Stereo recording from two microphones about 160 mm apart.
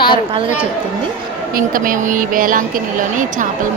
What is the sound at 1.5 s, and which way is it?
A woman's voice, 60° right (ahead or behind).